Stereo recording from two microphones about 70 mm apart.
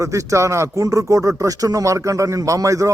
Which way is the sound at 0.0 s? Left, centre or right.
Right.